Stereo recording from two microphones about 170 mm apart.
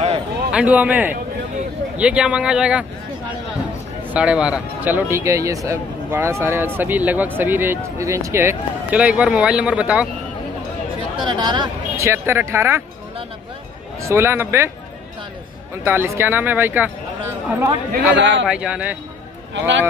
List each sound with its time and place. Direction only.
0.5 s speech: 10° right (ahead or behind)
4.1 s speech: 5° right (ahead or behind)
11.1 s speech: 25° right (ahead or behind)
12.1 s speech: 15° right (ahead or behind)
14.0 s speech: 15° right (ahead or behind)
15.7 s speech: 15° right (ahead or behind)
17.9 s a man's voice: 90° right
18.5 s a man's voice: 5° right (ahead or behind)
19.5 s a man's voice: 90° right